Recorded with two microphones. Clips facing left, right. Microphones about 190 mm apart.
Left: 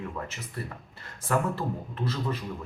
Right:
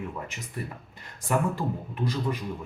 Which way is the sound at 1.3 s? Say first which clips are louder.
Right 1 dB; 15° right (ahead or behind).